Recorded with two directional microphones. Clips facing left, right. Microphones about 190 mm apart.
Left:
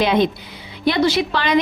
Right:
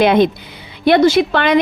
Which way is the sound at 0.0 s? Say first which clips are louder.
Right 5 dB; 55° right (ahead or behind).